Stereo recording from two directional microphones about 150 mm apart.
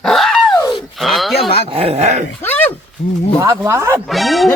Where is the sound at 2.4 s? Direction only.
10° left (ahead or behind).